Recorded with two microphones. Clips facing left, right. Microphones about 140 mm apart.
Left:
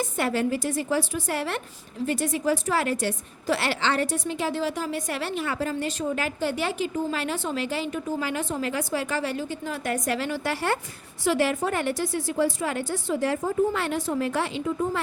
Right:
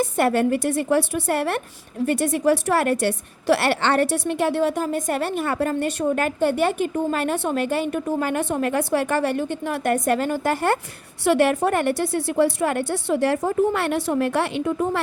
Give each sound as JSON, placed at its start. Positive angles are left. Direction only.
{"t": 0.0, "sound": "a woman's voice", "side_deg": -60}
{"t": 11.2, "sound": "a woman's voice", "side_deg": -60}